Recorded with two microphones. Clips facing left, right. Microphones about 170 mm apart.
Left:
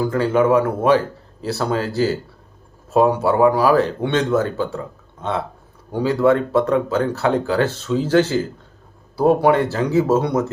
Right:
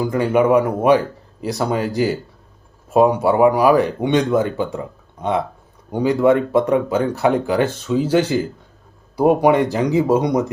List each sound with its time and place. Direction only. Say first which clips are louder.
0.0 s speech: right 1 dB; 15° right (ahead or behind)